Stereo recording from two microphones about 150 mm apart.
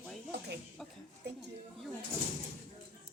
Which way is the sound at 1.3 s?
90° right.